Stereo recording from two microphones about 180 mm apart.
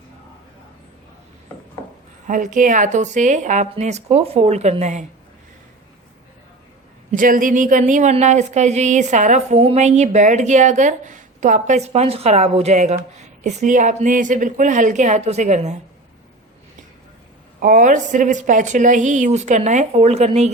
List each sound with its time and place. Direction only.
2.2 s a woman's voice: 45° right (ahead or behind)
7.1 s a woman's voice: 50° right (ahead or behind)
17.6 s a woman's voice: 45° right (ahead or behind)